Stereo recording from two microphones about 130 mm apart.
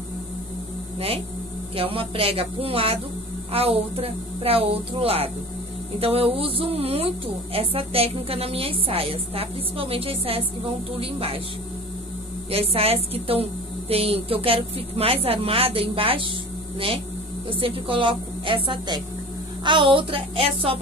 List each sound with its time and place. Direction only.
0.9 s a woman's voice: 50° right (ahead or behind)
12.4 s a woman's voice: 45° right (ahead or behind)
17.5 s a woman's voice: 45° right (ahead or behind)